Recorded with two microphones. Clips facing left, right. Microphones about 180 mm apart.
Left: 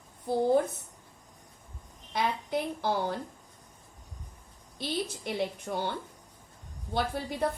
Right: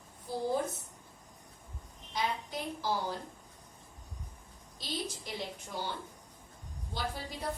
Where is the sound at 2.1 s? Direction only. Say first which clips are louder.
Left 5 dB; 60° left (ahead or behind).